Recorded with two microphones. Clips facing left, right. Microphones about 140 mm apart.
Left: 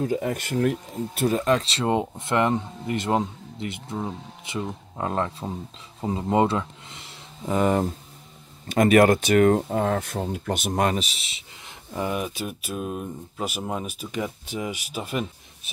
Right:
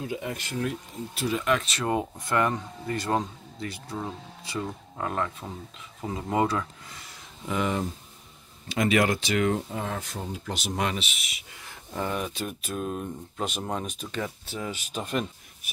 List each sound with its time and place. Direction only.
0.0 s speech: 45° left (ahead or behind)
1.4 s speech: 30° left (ahead or behind)
5.9 s a sound: 25° left (ahead or behind)
7.4 s speech: 45° left (ahead or behind); by 15.2 s 5° left (ahead or behind)
15.6 s speech: 25° left (ahead or behind)